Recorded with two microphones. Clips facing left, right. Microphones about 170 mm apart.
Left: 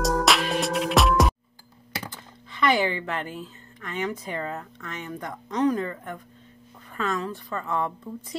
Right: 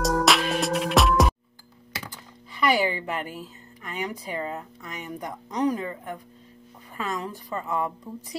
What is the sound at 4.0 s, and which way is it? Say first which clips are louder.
Speech: left 1 dB; 10° right (ahead or behind).